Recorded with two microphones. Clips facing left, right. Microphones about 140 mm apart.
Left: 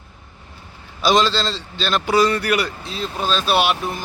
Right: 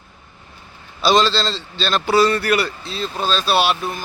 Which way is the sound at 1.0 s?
15° left (ahead or behind).